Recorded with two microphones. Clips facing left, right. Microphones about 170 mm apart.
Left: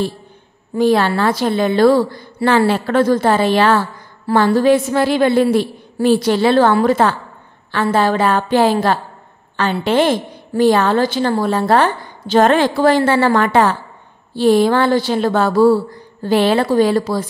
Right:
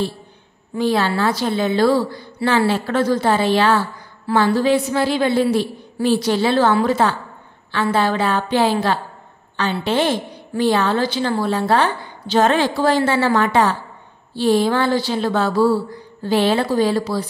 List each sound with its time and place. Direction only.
0.7 s a woman's voice: 50° left (ahead or behind)